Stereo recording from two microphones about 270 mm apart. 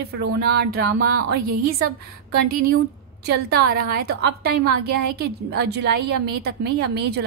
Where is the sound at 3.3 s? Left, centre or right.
Right.